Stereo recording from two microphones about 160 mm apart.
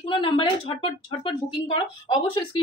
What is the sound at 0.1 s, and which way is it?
A woman's voice, 35° left (ahead or behind).